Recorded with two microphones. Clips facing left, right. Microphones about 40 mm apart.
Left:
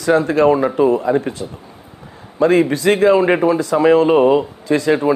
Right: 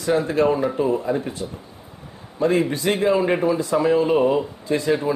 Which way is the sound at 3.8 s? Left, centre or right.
Left.